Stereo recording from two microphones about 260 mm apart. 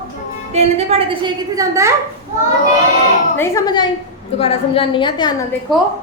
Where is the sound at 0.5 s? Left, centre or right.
Right.